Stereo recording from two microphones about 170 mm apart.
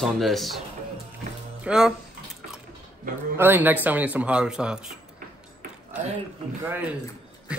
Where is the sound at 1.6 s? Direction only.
5° right (ahead or behind).